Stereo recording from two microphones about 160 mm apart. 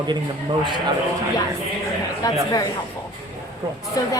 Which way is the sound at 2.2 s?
20° left (ahead or behind).